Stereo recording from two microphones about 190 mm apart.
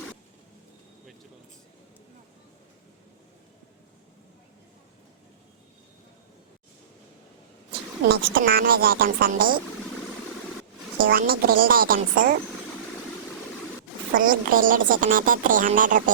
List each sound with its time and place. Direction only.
8.0 s a woman's voice: 60° right (ahead or behind)
10.9 s a woman's voice: 45° right (ahead or behind)
14.1 s a woman's voice: 45° right (ahead or behind)